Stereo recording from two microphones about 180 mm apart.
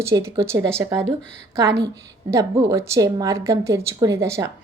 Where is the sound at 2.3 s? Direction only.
15° right (ahead or behind).